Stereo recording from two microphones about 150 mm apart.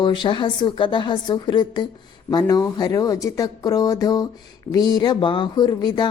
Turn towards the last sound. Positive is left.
turn(degrees=30)  # may be behind; listen again after turning